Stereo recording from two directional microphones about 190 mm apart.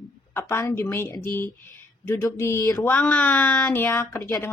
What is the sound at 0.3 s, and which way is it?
Speech, 15° left (ahead or behind).